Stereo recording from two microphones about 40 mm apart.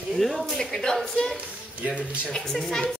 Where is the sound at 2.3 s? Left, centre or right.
Centre.